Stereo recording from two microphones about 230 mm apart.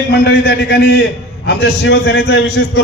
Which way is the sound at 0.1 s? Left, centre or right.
Left.